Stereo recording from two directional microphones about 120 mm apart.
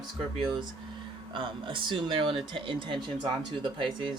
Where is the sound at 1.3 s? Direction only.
45° right (ahead or behind).